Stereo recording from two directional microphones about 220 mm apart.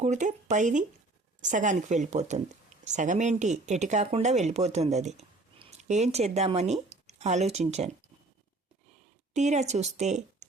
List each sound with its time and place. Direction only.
0.0 s speech: 35° right (ahead or behind)
9.3 s speech: 30° right (ahead or behind)